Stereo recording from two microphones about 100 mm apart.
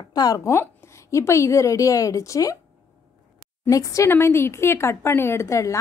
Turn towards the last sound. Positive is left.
turn(degrees=30)  # may be behind; listen again after turning